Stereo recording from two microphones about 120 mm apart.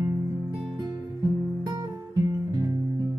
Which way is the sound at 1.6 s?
30° right (ahead or behind).